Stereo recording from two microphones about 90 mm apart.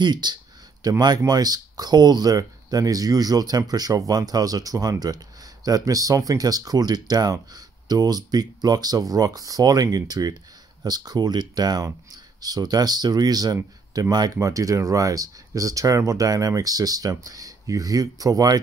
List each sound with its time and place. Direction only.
0.0 s speech: 55° right (ahead or behind)